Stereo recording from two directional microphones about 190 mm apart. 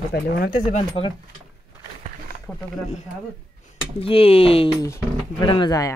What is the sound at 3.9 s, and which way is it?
Speech, 30° left (ahead or behind).